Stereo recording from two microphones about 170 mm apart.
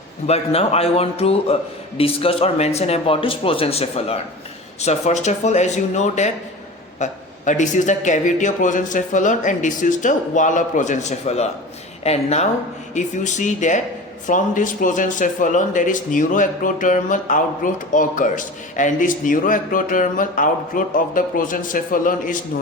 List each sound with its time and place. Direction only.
0.3 s speech: 35° left (ahead or behind); by 22.4 s 55° left (ahead or behind)